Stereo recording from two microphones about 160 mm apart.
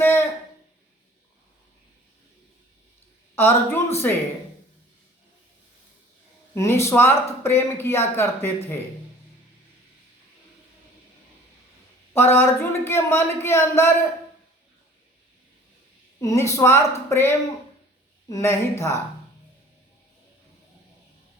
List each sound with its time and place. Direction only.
0.0 s a sound: 15° left (ahead or behind)
3.3 s speech: 15° left (ahead or behind)
6.5 s speech: 15° left (ahead or behind)
12.1 s speech: 15° left (ahead or behind)
16.2 s speech: 20° left (ahead or behind)